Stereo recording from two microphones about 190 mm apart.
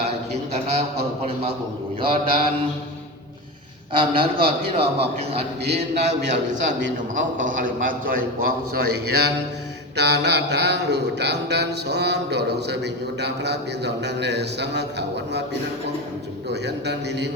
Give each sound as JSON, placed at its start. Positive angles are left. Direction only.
{"t": 0.5, "sound": "a man's voice", "side_deg": -35}
{"t": 2.0, "sound": "mantra", "side_deg": -25}
{"t": 3.9, "sound": "mantra", "side_deg": -25}
{"t": 4.4, "sound": "a man's voice", "side_deg": -30}
{"t": 9.9, "sound": "mantra", "side_deg": -60}
{"t": 16.5, "sound": "mantra", "side_deg": -65}